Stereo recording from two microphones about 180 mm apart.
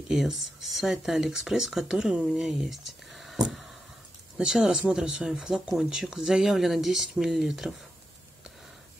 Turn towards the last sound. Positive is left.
turn(degrees=0)  # may be behind; listen again after turning